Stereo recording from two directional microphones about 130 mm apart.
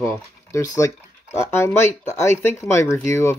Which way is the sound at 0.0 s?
20° left (ahead or behind).